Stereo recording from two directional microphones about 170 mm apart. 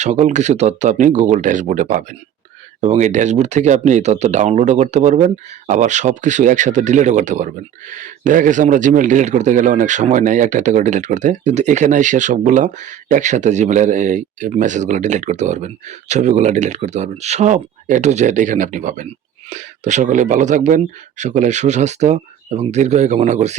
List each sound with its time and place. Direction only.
0.0 s speech: 45° right (ahead or behind)